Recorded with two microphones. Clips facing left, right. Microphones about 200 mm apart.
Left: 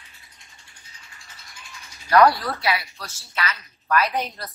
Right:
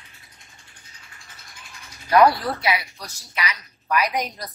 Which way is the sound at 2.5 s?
20° right (ahead or behind).